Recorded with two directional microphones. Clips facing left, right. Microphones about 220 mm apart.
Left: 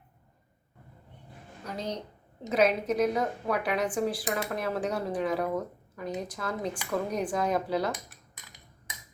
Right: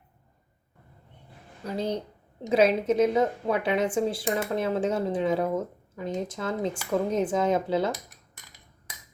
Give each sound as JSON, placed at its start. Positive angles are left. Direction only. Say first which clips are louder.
{"t": 1.6, "sound": "a woman's voice", "louder": "right 6 dB", "side_deg": -30}